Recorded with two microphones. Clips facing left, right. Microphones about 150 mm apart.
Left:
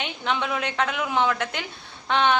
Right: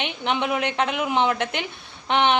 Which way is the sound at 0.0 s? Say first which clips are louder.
Right 2 dB; 20° right (ahead or behind).